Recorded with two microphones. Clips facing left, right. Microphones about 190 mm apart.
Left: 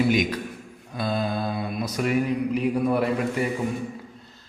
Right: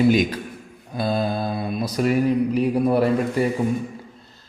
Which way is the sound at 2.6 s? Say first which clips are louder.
Right 1 dB; 35° right (ahead or behind).